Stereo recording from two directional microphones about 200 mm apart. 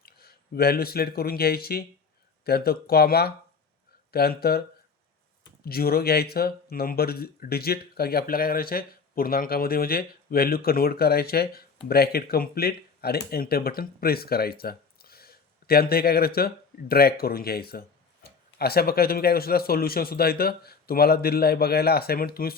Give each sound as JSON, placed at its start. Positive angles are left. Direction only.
{"t": 0.0, "sound": "speech", "side_deg": 50}